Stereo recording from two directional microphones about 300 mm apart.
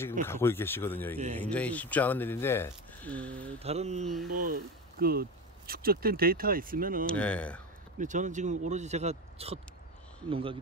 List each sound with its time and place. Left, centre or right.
0.2 s speech: centre
3.5 s speech: right
7.1 s speech: centre
8.0 s speech: right